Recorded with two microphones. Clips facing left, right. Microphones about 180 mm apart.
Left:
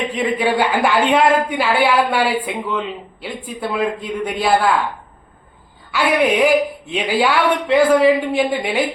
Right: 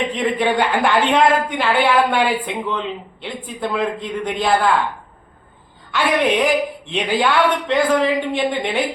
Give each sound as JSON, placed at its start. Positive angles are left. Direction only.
{"t": 0.2, "sound": "a woman's voice", "side_deg": 5}
{"t": 5.9, "sound": "a woman's voice", "side_deg": 5}